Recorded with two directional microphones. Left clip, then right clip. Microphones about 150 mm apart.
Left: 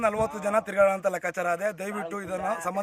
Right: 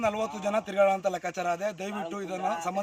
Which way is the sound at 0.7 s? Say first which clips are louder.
Even; 15° left (ahead or behind).